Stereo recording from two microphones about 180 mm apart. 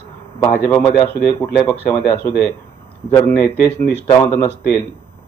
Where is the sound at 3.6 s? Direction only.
65° left (ahead or behind).